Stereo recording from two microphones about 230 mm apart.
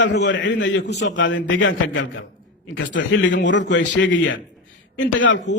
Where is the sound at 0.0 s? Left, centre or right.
Left.